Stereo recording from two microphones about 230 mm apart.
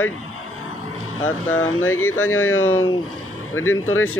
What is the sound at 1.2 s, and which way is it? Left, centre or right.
Speech, left.